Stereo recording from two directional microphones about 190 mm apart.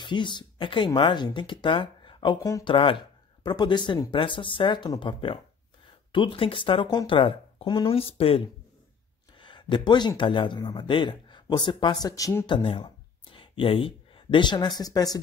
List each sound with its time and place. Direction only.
0.0 s speech: 25° left (ahead or behind)